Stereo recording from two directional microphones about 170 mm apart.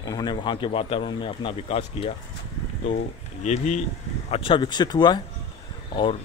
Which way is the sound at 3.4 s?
45° left (ahead or behind).